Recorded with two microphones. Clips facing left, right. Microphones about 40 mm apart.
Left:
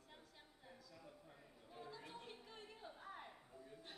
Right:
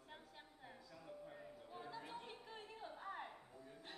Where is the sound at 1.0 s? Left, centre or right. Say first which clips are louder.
Right 7 dB; centre.